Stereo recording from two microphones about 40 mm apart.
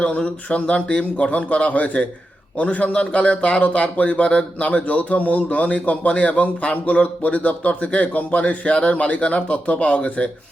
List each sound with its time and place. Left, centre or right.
0.2 s speech: left